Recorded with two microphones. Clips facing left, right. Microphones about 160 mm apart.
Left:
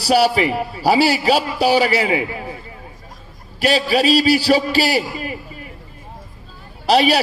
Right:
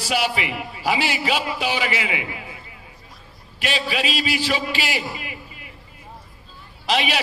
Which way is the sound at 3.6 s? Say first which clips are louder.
Left 8 dB; 40° left (ahead or behind).